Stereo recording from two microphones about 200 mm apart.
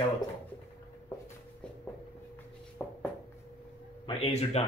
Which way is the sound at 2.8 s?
5° left (ahead or behind).